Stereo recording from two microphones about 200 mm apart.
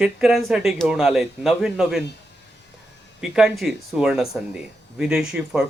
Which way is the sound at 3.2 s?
5° right (ahead or behind).